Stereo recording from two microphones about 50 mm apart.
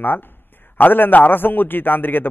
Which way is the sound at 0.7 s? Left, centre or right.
Left.